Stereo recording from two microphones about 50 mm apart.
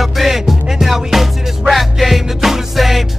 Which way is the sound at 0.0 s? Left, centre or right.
Centre.